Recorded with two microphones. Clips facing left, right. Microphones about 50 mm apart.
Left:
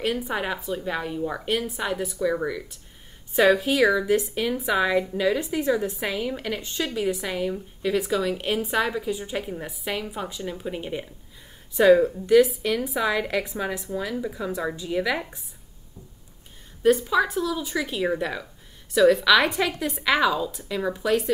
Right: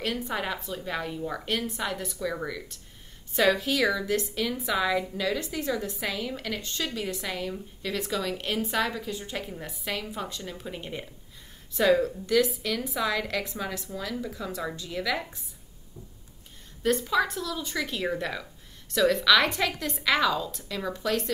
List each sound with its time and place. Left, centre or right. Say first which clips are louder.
0.0 s a woman's voice: left 4 dB; centre
16.8 s a woman's voice: left 5 dB; centre